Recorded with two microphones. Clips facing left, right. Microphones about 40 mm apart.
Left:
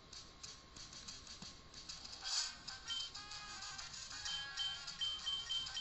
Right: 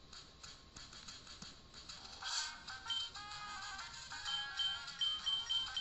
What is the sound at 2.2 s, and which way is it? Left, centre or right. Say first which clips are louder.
Music: right 2 dB; right.